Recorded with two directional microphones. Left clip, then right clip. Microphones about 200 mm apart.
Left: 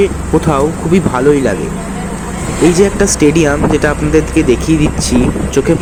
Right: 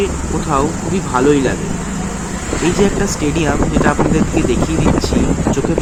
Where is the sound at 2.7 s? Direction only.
25° left (ahead or behind).